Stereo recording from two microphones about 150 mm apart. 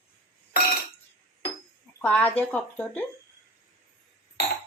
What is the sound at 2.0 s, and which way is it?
A woman's voice, 10° left (ahead or behind).